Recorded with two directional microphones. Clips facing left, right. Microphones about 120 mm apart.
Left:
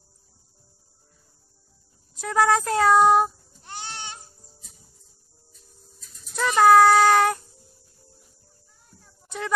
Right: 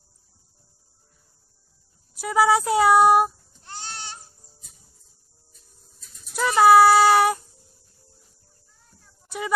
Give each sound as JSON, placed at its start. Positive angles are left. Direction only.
{"t": 2.1, "sound": "speech", "side_deg": -10}
{"t": 3.6, "sound": "goat", "side_deg": 15}
{"t": 5.9, "sound": "a sound", "side_deg": -5}